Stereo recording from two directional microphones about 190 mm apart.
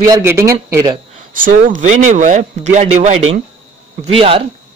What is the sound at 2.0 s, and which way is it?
Speech, 40° right (ahead or behind).